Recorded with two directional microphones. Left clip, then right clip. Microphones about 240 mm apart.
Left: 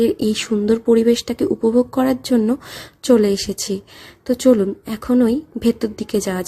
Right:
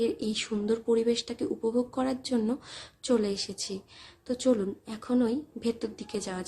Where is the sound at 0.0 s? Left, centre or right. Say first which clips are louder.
Left 12 dB; left.